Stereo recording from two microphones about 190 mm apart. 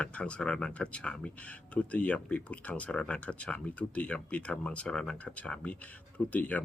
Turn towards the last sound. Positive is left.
turn(degrees=10)  # may be behind; listen again after turning